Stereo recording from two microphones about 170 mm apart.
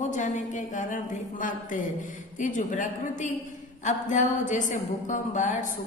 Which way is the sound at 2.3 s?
50° left (ahead or behind).